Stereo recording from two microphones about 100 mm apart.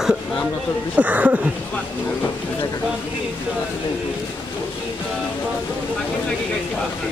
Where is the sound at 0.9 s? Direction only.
15° right (ahead or behind).